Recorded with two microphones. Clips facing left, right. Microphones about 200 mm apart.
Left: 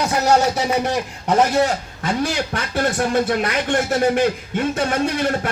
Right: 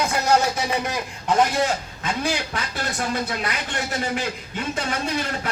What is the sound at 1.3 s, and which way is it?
Speech, 40° left (ahead or behind).